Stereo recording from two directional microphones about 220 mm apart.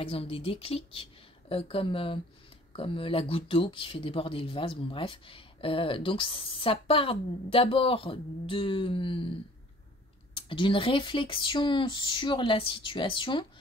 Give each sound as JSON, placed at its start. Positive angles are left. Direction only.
{"t": 0.0, "sound": "speech", "side_deg": 25}
{"t": 10.3, "sound": "speech", "side_deg": 25}